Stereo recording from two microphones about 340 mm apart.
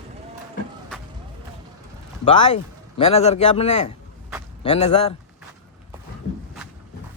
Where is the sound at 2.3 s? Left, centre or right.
Centre.